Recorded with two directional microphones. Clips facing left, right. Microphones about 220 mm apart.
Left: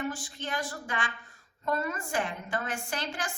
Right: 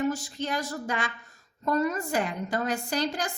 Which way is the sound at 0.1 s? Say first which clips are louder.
Right 6 dB; 40° right (ahead or behind).